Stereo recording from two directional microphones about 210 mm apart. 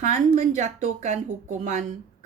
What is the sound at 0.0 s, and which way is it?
A woman's voice, 35° right (ahead or behind).